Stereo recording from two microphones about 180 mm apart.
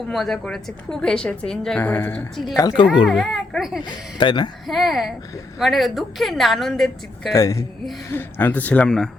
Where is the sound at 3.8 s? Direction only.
25° left (ahead or behind).